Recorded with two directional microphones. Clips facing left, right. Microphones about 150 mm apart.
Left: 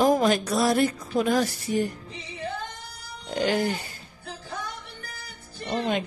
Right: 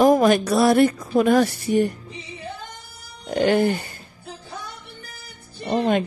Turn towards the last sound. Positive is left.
turn(degrees=-50)  # may be behind; listen again after turning